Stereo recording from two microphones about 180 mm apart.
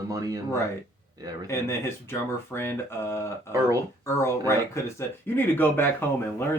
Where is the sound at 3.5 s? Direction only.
15° right (ahead or behind).